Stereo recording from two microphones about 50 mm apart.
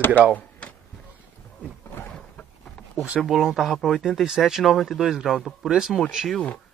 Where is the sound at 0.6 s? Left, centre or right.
Left.